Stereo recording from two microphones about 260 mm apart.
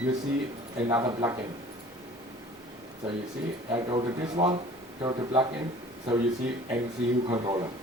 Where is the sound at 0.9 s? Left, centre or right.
Centre.